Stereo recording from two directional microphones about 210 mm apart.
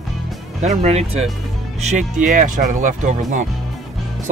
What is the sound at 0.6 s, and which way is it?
Speech, 30° right (ahead or behind).